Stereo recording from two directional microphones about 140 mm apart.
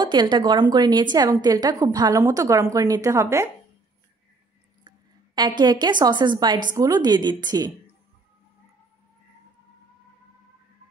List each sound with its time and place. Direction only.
0.0 s a woman's voice: 30° right (ahead or behind)
4.8 s a sound: 30° right (ahead or behind)
5.6 s a woman's voice: 30° right (ahead or behind)